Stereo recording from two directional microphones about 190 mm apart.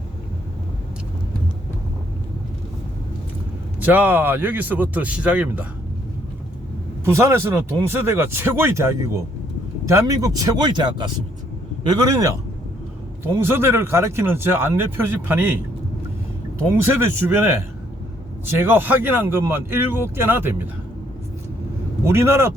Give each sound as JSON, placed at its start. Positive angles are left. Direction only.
{"t": 3.8, "sound": "speech", "side_deg": -10}
{"t": 7.0, "sound": "speech", "side_deg": -15}
{"t": 22.0, "sound": "speech", "side_deg": -15}